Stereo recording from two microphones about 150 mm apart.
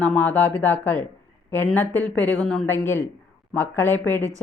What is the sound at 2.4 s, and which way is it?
Speech, centre (ahead or behind).